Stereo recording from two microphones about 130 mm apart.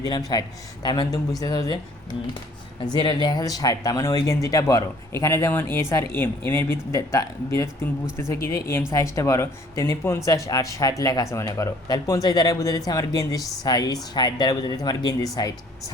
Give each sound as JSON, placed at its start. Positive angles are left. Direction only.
{"t": 0.0, "sound": "speech", "side_deg": 30}
{"t": 2.8, "sound": "speech", "side_deg": 35}